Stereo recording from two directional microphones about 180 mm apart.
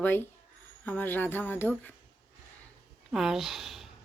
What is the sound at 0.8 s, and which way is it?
Speech, 10° left (ahead or behind).